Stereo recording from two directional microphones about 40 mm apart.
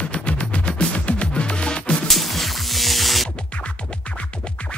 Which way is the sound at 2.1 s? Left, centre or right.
Centre.